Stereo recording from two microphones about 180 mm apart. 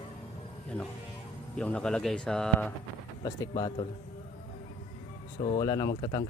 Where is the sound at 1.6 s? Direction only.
5° left (ahead or behind).